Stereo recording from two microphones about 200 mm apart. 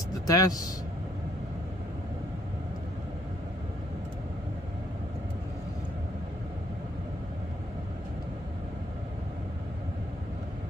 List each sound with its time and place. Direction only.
0.3 s speech: 20° left (ahead or behind)